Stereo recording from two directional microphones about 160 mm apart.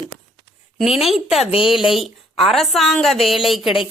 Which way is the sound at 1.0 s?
Centre (ahead or behind).